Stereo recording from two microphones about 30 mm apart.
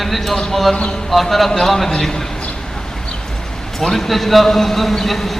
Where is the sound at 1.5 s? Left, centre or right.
Centre.